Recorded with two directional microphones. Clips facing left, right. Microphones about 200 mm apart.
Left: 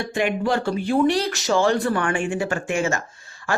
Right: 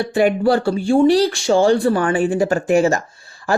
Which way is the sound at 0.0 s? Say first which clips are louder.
Right 7 dB; 35° right (ahead or behind).